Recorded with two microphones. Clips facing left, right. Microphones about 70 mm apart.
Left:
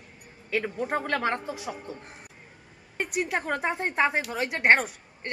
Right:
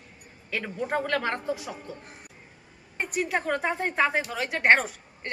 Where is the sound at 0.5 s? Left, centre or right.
Centre.